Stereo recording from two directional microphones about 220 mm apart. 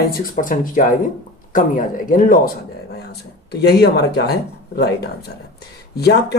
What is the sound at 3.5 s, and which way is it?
Speech, 50° left (ahead or behind).